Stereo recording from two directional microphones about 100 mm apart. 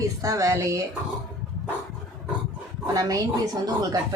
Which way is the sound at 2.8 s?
40° right (ahead or behind).